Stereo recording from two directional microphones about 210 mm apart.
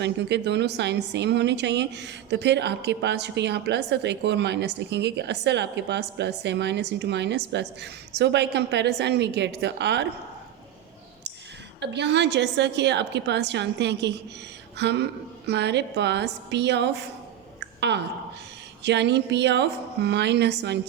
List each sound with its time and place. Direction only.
0.0 s a woman's voice: 55° right (ahead or behind)
11.8 s a woman's voice: 55° right (ahead or behind)
17.6 s a sound: 55° right (ahead or behind)
18.8 s a woman's voice: 55° right (ahead or behind)